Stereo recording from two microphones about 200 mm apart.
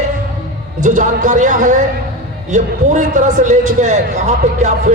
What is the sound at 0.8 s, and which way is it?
A man's voice, 40° right (ahead or behind).